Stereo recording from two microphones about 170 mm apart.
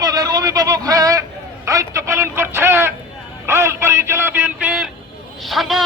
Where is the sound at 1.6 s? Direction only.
15° right (ahead or behind).